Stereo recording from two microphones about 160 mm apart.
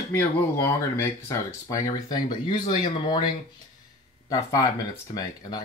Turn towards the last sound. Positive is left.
turn(degrees=25)  # may be behind; listen again after turning